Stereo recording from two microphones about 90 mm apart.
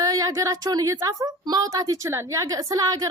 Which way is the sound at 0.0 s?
40° right (ahead or behind).